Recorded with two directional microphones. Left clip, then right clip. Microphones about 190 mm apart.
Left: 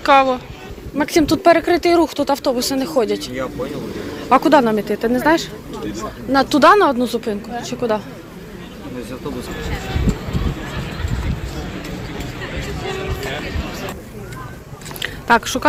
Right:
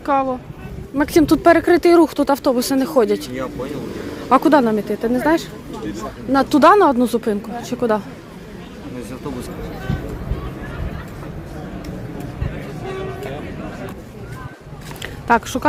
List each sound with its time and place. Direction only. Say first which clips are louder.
0.0 s speech: left 6 dB; 10° right (ahead or behind)
0.9 s speech: right 1 dB; 35° right (ahead or behind)
4.3 s speech: left 1 dB; 25° right (ahead or behind)
4.7 s a woman's voice: left 1 dB; 15° right (ahead or behind); by 8.0 s 40° right (ahead or behind)
15.0 s a sound: left 2 dB; 15° right (ahead or behind)